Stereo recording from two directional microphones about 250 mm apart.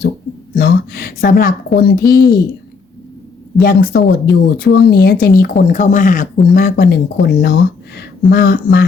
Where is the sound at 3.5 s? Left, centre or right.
Left.